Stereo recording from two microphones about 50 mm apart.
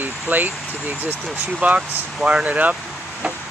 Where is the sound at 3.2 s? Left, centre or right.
Right.